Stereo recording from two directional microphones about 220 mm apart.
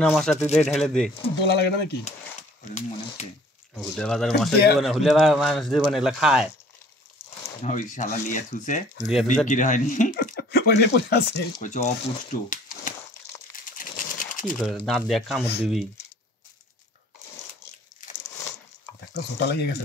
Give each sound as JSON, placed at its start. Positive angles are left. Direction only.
{"t": 0.0, "sound": "speech", "side_deg": 0}
{"t": 1.4, "sound": "speech", "side_deg": 50}
{"t": 3.7, "sound": "speech", "side_deg": 5}
{"t": 7.4, "sound": "speech", "side_deg": 35}
{"t": 9.1, "sound": "speech", "side_deg": 0}
{"t": 9.5, "sound": "speech", "side_deg": 35}
{"t": 11.6, "sound": "speech", "side_deg": 35}
{"t": 13.7, "sound": "sewing machine", "side_deg": 40}
{"t": 14.6, "sound": "speech", "side_deg": 0}
{"t": 19.3, "sound": "speech", "side_deg": 50}